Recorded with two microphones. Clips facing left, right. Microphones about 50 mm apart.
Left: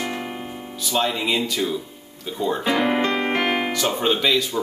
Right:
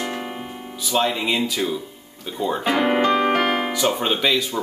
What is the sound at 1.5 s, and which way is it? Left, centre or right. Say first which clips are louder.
Speech: even; centre.